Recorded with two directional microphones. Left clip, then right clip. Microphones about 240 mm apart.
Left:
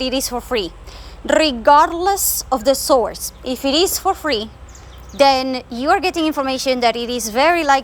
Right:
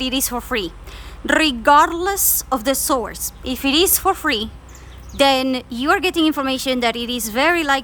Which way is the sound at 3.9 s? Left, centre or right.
Right.